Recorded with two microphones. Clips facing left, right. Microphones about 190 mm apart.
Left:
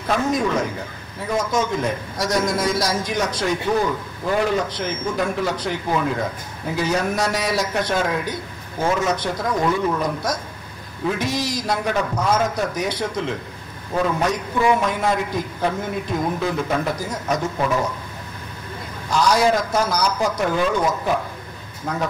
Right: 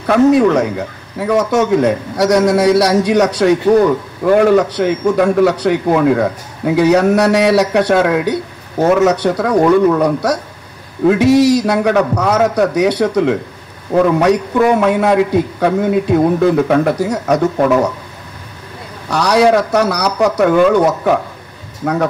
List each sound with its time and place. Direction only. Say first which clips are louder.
0.0 s a man's voice: right 11 dB; 65° right (ahead or behind)
19.0 s a man's voice: right 6 dB; 70° right (ahead or behind)